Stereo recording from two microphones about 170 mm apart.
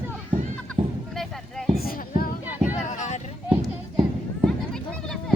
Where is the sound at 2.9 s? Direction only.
45° left (ahead or behind).